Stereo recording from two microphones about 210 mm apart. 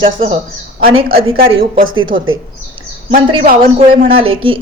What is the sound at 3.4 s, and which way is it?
Speech, 45° right (ahead or behind).